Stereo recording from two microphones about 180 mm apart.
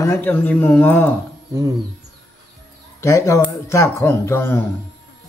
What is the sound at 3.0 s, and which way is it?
A woman's voice, 15° left (ahead or behind).